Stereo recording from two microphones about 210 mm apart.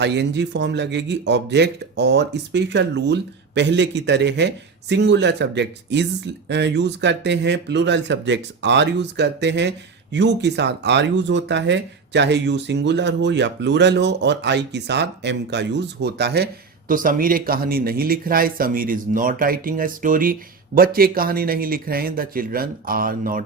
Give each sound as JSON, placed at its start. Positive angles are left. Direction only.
{"t": 0.0, "sound": "speech", "side_deg": -55}